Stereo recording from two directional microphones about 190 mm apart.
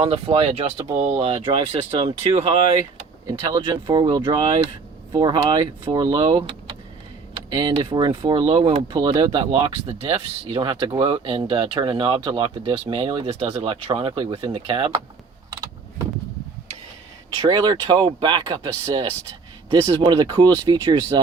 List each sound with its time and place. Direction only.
0.0 s speech: 30° right (ahead or behind)
7.5 s speech: 25° right (ahead or behind)
17.4 s speech: 20° right (ahead or behind)